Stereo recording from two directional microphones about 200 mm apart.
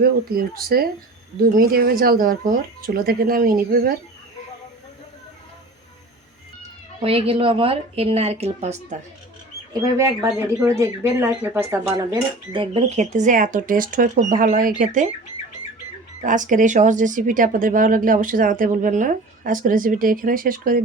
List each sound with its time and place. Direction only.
0.0 s speech: 50° right (ahead or behind)
6.6 s speech: 30° right (ahead or behind)
9.8 s speech: 15° right (ahead or behind)
12.7 s speech: 35° right (ahead or behind)
16.2 s speech: 40° right (ahead or behind)